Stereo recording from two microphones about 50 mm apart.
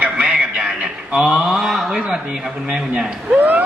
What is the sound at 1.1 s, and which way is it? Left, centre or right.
Speech, centre.